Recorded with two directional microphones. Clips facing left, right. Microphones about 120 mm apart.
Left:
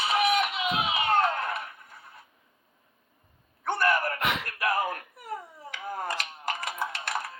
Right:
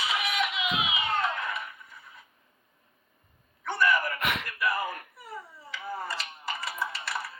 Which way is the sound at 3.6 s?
45° left (ahead or behind).